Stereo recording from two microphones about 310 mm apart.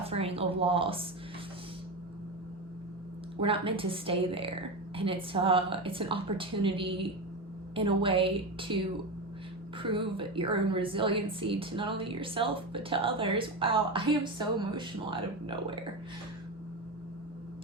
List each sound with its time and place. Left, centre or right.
0.0 s speech: centre
3.4 s a woman's voice: centre